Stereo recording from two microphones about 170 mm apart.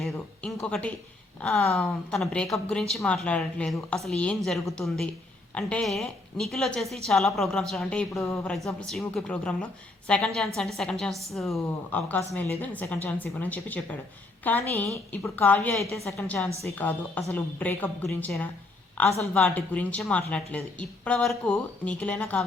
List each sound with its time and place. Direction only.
0.0 s a woman's voice: 5° left (ahead or behind)
8.2 s a woman's voice: 15° left (ahead or behind)
8.9 s a woman's voice: centre (ahead or behind)